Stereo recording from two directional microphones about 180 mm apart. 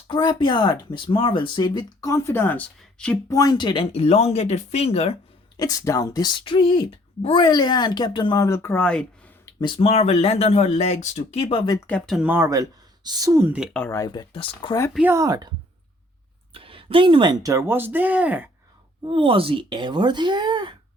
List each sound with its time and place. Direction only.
0.1 s speech: 25° left (ahead or behind); by 3.2 s 5° left (ahead or behind)
3.2 s speech: 20° left (ahead or behind); by 5.1 s 35° left (ahead or behind)
5.5 s speech: 20° left (ahead or behind)
9.6 s speech: 25° left (ahead or behind)
11.9 s speech: 5° left (ahead or behind)
13.7 s speech: 15° left (ahead or behind)
14.9 s speech: 10° right (ahead or behind)
16.6 s speech: 30° right (ahead or behind); by 18.4 s 10° right (ahead or behind)
19.0 s speech: 30° right (ahead or behind)